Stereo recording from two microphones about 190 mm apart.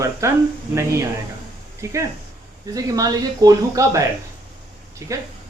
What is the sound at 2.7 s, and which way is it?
Speech, 20° right (ahead or behind).